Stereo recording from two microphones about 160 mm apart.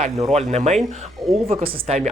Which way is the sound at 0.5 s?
45° right (ahead or behind).